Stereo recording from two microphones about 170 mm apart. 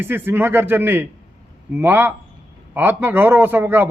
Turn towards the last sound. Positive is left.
turn(degrees=-10)  # may be behind; listen again after turning